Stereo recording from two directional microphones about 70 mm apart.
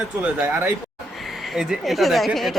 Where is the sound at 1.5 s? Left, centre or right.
Centre.